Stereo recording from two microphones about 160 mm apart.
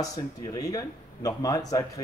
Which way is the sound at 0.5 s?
20° left (ahead or behind).